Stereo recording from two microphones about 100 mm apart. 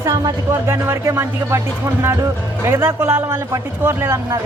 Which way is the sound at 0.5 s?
25° right (ahead or behind).